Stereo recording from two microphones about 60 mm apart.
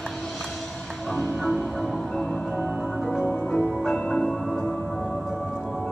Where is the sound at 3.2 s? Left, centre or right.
Left.